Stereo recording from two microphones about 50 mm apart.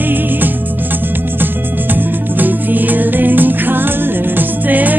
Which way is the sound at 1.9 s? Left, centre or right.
Right.